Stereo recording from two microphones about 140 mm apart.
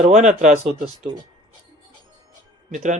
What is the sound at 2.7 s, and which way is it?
Speech, 60° right (ahead or behind).